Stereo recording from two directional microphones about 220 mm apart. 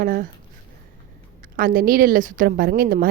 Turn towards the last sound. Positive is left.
turn(degrees=-40)  # may be behind; listen again after turning